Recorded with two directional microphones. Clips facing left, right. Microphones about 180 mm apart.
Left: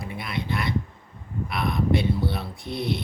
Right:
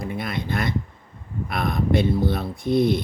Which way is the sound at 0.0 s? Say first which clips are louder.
Right 4 dB; 45° right (ahead or behind).